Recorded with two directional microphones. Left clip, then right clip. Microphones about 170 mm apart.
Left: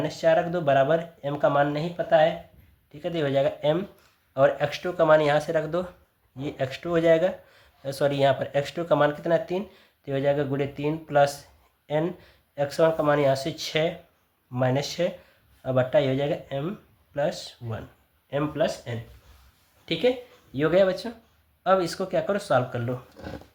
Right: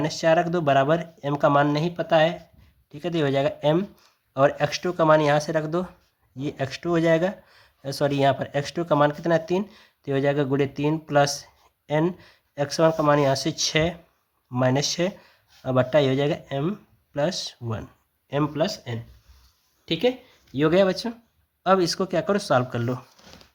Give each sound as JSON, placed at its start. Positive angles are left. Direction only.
{"t": 0.0, "sound": "speech", "side_deg": -35}